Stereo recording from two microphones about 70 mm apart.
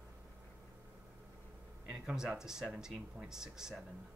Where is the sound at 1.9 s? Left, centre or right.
Centre.